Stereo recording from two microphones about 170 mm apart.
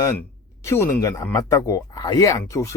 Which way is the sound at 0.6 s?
15° left (ahead or behind).